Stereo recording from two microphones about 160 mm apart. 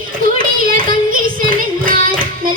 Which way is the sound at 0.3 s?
60° right (ahead or behind).